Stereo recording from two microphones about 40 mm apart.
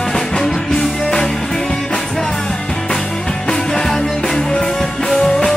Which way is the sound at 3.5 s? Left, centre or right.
Centre.